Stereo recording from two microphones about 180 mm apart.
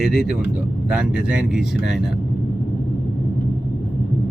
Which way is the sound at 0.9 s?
5° right (ahead or behind).